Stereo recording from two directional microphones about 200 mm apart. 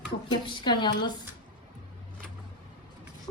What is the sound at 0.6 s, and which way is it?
Speech, 20° left (ahead or behind).